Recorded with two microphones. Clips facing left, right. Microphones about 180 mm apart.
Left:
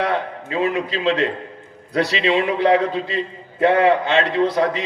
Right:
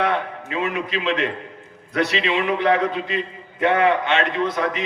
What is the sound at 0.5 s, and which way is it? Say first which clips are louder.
A man's voice: left 3 dB; 35° left (ahead or behind).